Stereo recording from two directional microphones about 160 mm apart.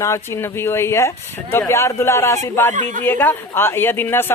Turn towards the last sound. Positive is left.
turn(degrees=15)  # may be behind; listen again after turning